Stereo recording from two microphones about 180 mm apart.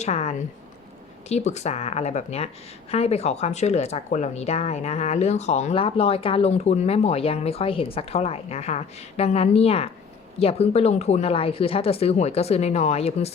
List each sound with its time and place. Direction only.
0.0 s speech: 40° left (ahead or behind)